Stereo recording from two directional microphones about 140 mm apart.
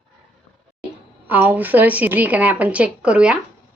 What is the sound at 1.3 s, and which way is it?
Speech, 15° right (ahead or behind).